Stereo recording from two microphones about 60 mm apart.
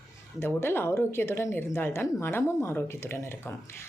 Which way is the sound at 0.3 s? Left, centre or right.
Left.